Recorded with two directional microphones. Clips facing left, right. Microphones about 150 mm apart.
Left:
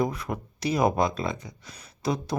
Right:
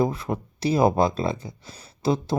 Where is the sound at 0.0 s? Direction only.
30° right (ahead or behind).